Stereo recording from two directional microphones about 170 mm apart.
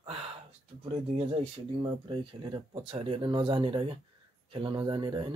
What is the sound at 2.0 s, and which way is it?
Speech, 25° right (ahead or behind).